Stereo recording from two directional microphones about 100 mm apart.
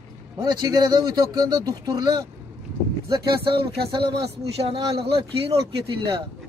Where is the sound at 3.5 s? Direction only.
75° right (ahead or behind).